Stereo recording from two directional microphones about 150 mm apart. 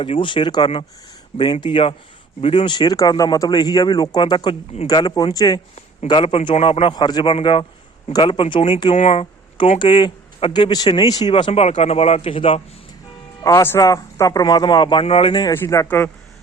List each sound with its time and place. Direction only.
0.0 s speech: 35° left (ahead or behind)
5.7 s speech: 40° left (ahead or behind)
13.4 s speech: 15° left (ahead or behind)
15.5 s speech: 20° left (ahead or behind)